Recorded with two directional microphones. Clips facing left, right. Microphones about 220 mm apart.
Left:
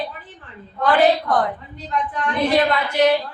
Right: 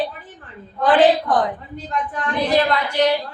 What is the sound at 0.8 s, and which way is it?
Speech, 20° right (ahead or behind).